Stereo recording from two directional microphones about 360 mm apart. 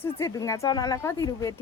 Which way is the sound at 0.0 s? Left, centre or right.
Centre.